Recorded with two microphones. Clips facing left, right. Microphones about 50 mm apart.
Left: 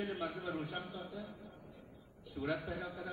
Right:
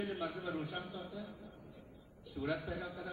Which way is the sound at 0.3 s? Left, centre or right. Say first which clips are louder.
Even; centre.